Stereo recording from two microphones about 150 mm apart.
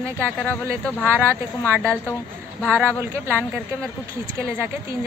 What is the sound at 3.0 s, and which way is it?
Speech, 15° right (ahead or behind).